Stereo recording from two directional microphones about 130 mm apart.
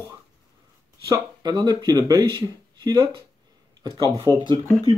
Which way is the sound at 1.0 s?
30° right (ahead or behind).